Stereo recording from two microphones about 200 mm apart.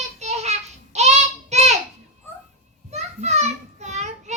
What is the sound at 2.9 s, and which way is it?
Children playing, 35° right (ahead or behind).